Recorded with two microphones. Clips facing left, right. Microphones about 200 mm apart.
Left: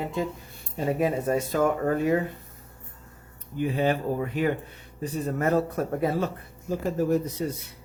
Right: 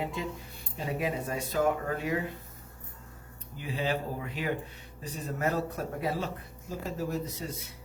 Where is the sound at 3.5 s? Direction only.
55° left (ahead or behind).